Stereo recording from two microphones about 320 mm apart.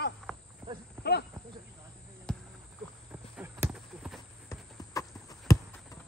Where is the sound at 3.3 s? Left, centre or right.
Centre.